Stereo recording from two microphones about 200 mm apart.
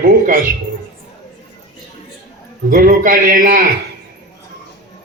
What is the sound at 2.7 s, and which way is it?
Speech, 45° right (ahead or behind).